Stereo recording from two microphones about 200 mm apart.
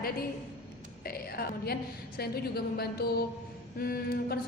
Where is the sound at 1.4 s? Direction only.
50° left (ahead or behind).